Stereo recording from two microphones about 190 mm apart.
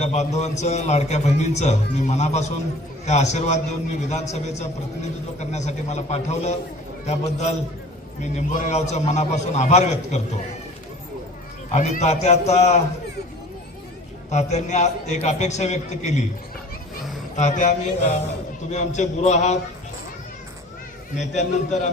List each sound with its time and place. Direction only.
0.0 s a man's voice: 35° left (ahead or behind)
11.7 s a man's voice: 40° left (ahead or behind)
14.3 s a man's voice: 35° left (ahead or behind)
17.3 s a man's voice: 40° left (ahead or behind)
21.2 s a man's voice: 35° left (ahead or behind)